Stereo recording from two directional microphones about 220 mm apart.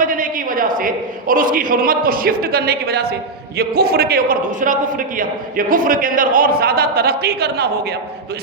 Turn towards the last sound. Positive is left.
turn(degrees=-45)  # may be behind; listen again after turning